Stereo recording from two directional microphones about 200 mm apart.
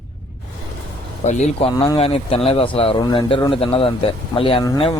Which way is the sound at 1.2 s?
35° left (ahead or behind).